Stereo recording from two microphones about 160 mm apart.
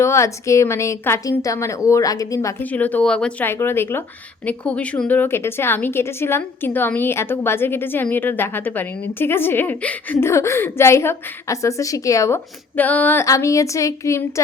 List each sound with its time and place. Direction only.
0.0 s a woman's voice: 20° left (ahead or behind)